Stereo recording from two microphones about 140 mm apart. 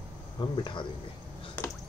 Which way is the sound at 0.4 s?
35° left (ahead or behind).